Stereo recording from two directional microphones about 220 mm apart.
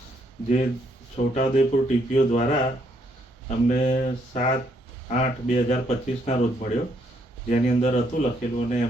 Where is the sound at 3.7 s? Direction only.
35° left (ahead or behind).